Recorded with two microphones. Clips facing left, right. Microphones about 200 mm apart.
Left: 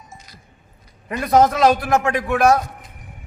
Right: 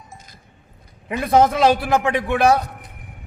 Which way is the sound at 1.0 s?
5° right (ahead or behind).